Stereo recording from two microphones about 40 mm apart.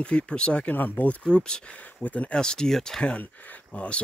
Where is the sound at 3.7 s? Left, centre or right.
Left.